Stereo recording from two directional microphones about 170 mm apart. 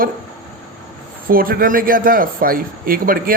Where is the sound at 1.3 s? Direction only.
60° right (ahead or behind).